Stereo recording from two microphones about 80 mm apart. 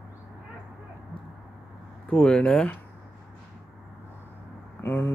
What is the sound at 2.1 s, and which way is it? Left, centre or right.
Speech, centre.